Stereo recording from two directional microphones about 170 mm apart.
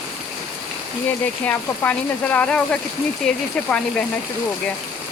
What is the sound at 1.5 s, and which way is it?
Speech, 10° left (ahead or behind).